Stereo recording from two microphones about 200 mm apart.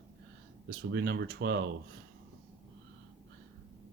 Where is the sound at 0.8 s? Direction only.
60° right (ahead or behind).